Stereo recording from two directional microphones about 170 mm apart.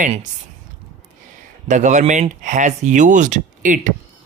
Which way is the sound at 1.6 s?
45° right (ahead or behind).